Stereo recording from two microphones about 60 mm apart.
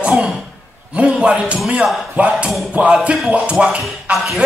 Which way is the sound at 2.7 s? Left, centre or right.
Centre.